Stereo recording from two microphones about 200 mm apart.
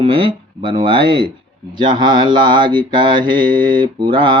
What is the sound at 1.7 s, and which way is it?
Mantra, 20° right (ahead or behind).